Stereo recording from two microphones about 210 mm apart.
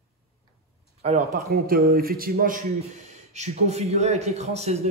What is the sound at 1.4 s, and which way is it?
A man's voice, 45° right (ahead or behind).